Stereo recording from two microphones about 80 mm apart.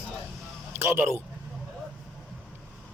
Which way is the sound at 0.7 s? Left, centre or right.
Right.